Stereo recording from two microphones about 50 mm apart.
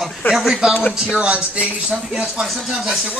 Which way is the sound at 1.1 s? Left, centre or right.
Right.